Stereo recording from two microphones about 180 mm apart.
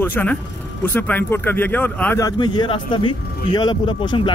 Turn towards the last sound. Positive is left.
turn(degrees=25)  # may be behind; listen again after turning